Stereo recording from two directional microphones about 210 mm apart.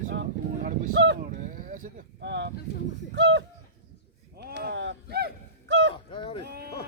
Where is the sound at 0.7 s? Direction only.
55° right (ahead or behind).